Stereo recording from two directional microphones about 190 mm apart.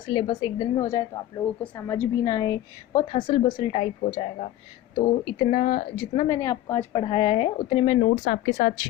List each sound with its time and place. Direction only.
0.1 s a woman's voice: 20° left (ahead or behind)
5.4 s speech: 40° left (ahead or behind)
6.2 s a woman's voice: 15° left (ahead or behind)
8.0 s speech: 45° left (ahead or behind)